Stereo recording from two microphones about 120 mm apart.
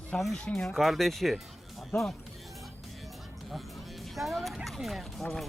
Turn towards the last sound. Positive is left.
turn(degrees=5)  # may be behind; listen again after turning